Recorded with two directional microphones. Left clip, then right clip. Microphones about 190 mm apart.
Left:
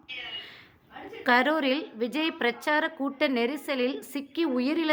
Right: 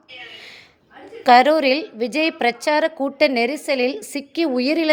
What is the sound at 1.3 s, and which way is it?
A woman's voice, 30° right (ahead or behind).